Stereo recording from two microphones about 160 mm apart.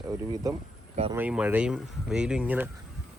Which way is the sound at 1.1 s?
10° right (ahead or behind).